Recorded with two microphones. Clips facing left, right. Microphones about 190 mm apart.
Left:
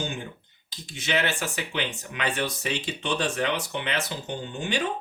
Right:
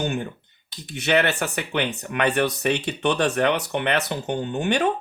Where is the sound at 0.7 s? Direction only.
65° right (ahead or behind).